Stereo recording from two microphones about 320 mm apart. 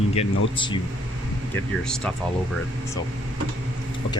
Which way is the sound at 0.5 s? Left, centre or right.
Centre.